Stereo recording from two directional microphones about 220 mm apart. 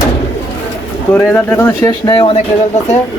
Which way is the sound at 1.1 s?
10° left (ahead or behind).